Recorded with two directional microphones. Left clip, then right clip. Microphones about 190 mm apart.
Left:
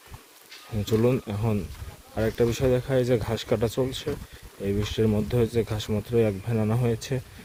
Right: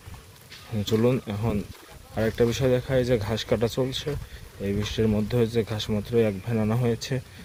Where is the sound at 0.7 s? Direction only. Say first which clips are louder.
Even; 5° left (ahead or behind).